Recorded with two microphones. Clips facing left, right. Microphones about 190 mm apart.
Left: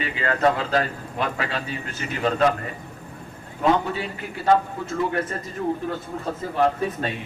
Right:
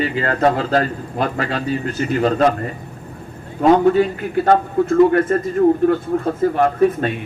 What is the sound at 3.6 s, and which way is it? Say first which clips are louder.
A man's voice: right 9 dB; 55° right (ahead or behind).